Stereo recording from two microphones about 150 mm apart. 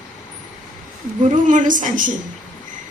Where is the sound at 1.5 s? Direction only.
60° right (ahead or behind).